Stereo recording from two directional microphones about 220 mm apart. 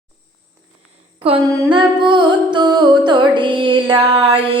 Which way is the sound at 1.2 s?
25° right (ahead or behind).